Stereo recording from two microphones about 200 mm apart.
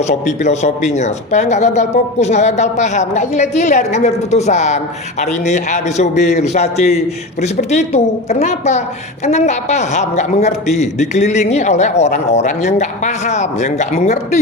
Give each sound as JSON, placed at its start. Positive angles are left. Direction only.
{"t": 0.1, "sound": "a man's voice", "side_deg": 35}